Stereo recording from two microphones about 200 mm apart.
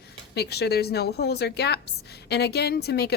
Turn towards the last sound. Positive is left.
turn(degrees=55)  # may be behind; listen again after turning